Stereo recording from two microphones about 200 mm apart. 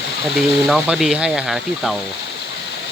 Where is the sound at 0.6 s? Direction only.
Centre (ahead or behind).